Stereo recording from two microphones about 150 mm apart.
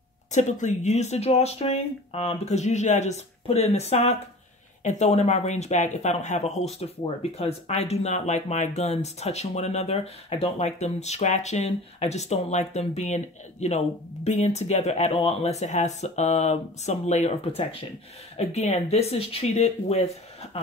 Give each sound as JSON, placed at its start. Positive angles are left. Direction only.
{"t": 0.3, "sound": "speech", "side_deg": 50}